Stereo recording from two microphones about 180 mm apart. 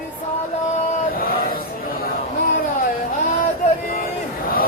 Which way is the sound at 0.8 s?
50° left (ahead or behind).